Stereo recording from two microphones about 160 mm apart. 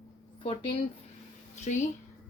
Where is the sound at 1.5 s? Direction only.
45° left (ahead or behind).